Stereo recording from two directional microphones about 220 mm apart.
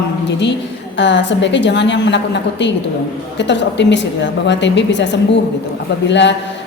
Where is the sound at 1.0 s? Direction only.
55° left (ahead or behind).